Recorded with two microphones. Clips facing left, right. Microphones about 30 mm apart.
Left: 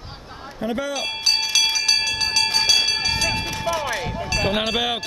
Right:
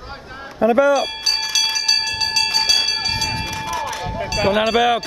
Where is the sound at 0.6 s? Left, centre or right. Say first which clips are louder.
Right 12 dB; right.